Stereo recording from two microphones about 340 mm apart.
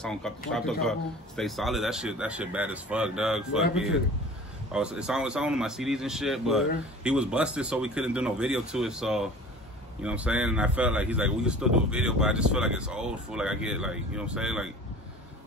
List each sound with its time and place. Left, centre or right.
0.0 s speech: centre